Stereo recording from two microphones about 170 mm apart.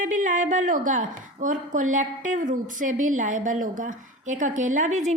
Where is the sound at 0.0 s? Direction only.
50° right (ahead or behind).